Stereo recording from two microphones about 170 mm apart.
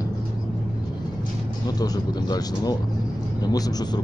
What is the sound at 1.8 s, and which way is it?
Speech, 25° left (ahead or behind).